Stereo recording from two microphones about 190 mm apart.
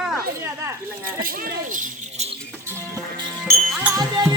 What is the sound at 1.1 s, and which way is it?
Speech, 50° right (ahead or behind).